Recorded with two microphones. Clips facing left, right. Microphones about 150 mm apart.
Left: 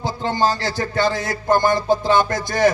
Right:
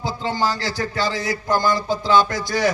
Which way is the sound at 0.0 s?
50° left (ahead or behind).